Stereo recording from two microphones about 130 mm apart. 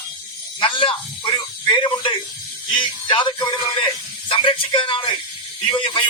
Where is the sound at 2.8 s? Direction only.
40° left (ahead or behind).